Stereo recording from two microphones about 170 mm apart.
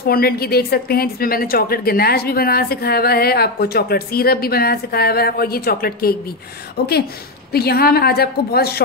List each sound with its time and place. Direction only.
0.0 s a woman's voice: 60° left (ahead or behind)